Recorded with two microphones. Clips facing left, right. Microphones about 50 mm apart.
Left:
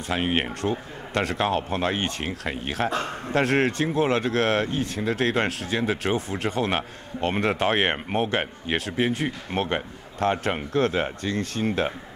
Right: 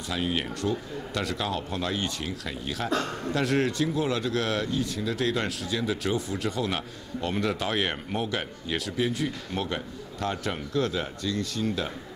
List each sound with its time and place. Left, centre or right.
0.1 s a man's voice: left